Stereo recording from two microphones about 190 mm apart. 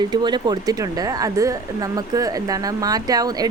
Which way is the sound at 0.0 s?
25° right (ahead or behind).